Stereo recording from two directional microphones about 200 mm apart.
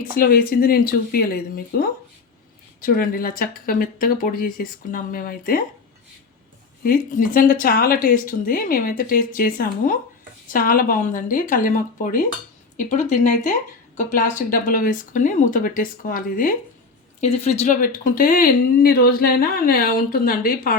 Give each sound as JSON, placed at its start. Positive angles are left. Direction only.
{"t": 0.1, "sound": "speech", "side_deg": 45}
{"t": 6.8, "sound": "speech", "side_deg": 45}
{"t": 17.2, "sound": "speech", "side_deg": 30}